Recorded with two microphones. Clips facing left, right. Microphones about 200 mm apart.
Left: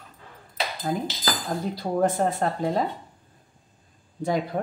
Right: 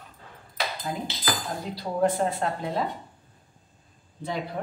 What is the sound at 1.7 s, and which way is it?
Speech, 45° left (ahead or behind).